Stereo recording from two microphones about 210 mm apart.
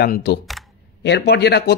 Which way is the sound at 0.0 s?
50° left (ahead or behind).